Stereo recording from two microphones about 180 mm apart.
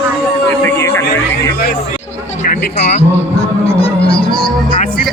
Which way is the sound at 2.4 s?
40° left (ahead or behind).